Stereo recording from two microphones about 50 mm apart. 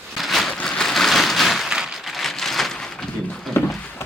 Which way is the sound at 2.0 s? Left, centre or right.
Centre.